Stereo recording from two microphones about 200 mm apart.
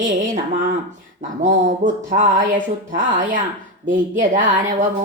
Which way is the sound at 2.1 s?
40° right (ahead or behind).